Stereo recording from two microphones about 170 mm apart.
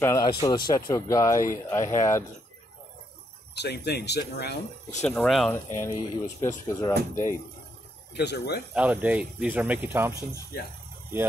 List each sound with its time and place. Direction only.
0.0 s speech: 20° left (ahead or behind)
3.5 s speech: 75° left (ahead or behind)
5.0 s speech: 5° left (ahead or behind)
5.8 s speech: 15° left (ahead or behind)
8.2 s speech: 75° left (ahead or behind)
8.7 s speech: 10° right (ahead or behind)